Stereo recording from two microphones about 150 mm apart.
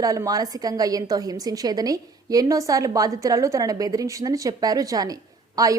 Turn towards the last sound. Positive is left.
turn(degrees=-25)  # may be behind; listen again after turning